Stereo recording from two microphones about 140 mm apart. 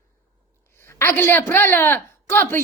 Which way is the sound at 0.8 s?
15° left (ahead or behind).